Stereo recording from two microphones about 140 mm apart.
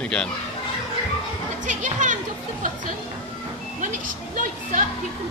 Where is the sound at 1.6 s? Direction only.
60° right (ahead or behind).